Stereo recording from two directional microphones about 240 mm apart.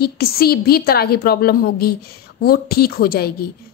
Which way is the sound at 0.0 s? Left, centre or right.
Left.